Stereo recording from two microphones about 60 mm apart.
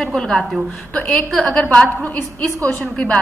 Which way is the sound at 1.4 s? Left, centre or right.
Centre.